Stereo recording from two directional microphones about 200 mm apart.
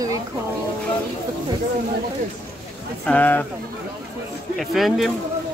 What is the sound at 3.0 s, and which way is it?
Speech, 10° left (ahead or behind).